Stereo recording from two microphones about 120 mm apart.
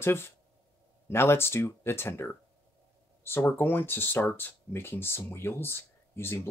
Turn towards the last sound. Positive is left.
turn(degrees=20)  # may be behind; listen again after turning